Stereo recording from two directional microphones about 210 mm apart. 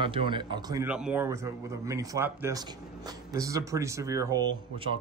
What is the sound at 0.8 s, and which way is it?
Speech, 5° right (ahead or behind).